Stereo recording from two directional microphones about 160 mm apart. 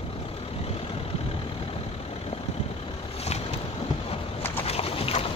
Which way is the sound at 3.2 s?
40° left (ahead or behind).